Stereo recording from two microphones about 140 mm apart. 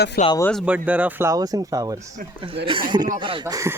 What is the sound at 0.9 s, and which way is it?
Speech, 10° right (ahead or behind).